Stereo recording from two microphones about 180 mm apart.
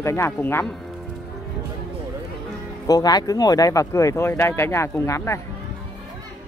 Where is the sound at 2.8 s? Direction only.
20° left (ahead or behind).